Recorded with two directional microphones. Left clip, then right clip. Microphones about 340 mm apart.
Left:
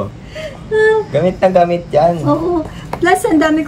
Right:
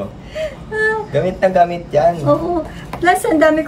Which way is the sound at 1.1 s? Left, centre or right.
Centre.